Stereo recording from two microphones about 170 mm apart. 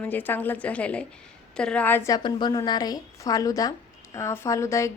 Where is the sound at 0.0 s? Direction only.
10° left (ahead or behind).